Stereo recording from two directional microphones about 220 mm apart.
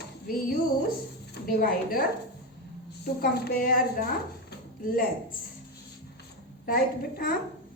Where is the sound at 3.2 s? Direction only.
45° left (ahead or behind).